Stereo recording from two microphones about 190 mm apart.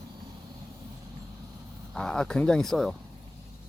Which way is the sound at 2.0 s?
5° left (ahead or behind).